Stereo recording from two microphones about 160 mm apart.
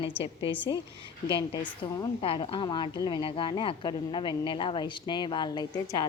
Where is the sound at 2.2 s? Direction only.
35° left (ahead or behind).